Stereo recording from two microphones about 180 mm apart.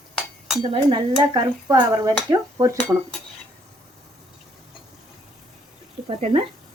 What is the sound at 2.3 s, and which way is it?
Speech, 20° right (ahead or behind).